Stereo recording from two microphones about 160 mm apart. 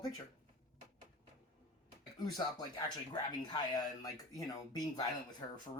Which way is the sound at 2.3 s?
25° left (ahead or behind).